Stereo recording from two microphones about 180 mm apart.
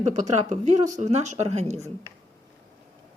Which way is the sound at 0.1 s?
40° right (ahead or behind).